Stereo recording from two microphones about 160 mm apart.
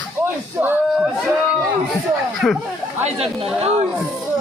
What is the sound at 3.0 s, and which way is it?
Speech, 40° right (ahead or behind).